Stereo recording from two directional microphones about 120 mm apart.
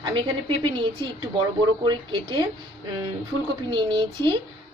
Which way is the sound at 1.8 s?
40° right (ahead or behind).